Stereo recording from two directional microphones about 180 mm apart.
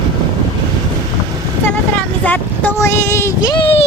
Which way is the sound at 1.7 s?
10° left (ahead or behind).